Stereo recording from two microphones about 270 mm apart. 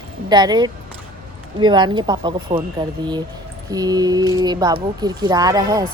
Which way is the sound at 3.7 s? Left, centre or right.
Centre.